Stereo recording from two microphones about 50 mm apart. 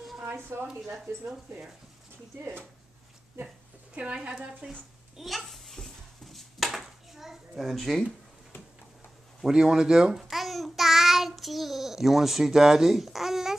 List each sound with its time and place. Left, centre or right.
0.2 s a sound: right
2.3 s speech: right
3.9 s a woman's voice: right
5.1 s a sound: centre
9.4 s speech: centre
10.3 s a child's voice: centre